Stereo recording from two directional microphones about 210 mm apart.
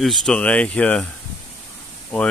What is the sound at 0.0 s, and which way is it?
Speech, centre (ahead or behind).